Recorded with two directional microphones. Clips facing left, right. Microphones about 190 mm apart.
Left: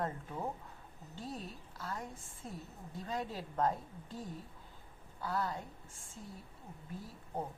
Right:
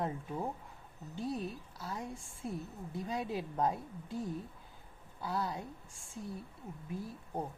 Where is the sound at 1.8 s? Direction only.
15° right (ahead or behind).